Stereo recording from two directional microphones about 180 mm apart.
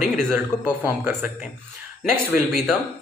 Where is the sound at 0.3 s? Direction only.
10° right (ahead or behind).